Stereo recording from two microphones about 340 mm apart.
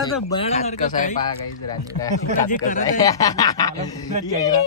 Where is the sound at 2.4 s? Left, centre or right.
Left.